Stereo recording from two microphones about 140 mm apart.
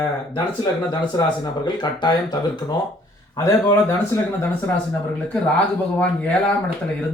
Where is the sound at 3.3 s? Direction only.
20° left (ahead or behind).